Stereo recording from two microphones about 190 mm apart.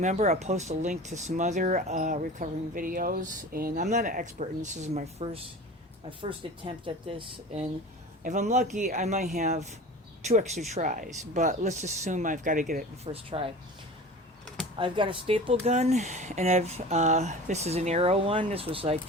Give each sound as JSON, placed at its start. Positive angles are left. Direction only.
{"t": 0.0, "sound": "speech", "side_deg": -35}
{"t": 6.7, "sound": "speech", "side_deg": -25}
{"t": 8.2, "sound": "speech", "side_deg": -40}
{"t": 13.1, "sound": "speech", "side_deg": -30}
{"t": 14.8, "sound": "speech", "side_deg": -25}